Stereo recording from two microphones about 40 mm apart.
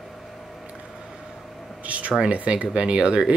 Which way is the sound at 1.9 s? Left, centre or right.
Right.